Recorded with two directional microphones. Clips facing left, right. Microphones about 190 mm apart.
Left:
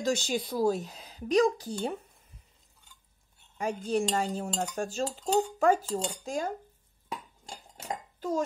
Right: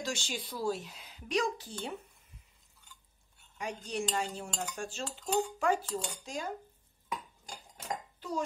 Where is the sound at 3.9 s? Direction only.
40° left (ahead or behind).